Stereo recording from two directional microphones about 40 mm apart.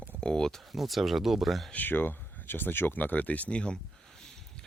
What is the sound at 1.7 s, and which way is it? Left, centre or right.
Speech, left.